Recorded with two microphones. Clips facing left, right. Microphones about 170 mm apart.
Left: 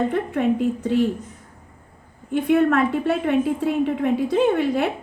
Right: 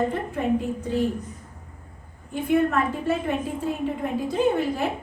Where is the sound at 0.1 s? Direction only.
65° left (ahead or behind).